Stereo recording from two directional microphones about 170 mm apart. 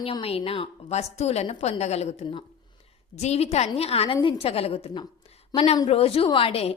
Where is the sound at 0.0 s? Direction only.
35° left (ahead or behind).